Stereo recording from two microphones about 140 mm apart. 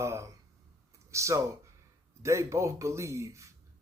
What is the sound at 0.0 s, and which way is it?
Speech, 20° right (ahead or behind).